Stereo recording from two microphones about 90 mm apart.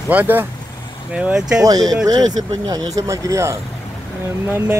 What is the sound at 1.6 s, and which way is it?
Speech, 40° right (ahead or behind).